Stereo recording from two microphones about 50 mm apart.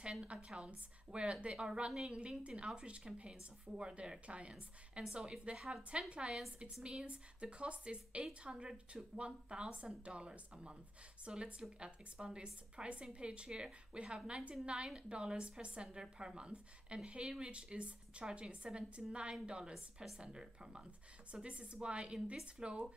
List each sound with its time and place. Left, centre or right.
0.0 s a woman's voice: right
5.9 s speech: right